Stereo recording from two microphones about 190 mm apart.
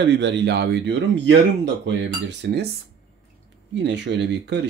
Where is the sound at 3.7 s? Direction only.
65° right (ahead or behind).